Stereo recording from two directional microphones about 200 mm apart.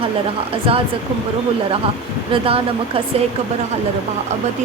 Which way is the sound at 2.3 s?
30° right (ahead or behind).